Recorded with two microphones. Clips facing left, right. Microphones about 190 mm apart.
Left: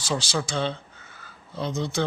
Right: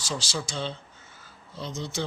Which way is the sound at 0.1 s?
60° left (ahead or behind).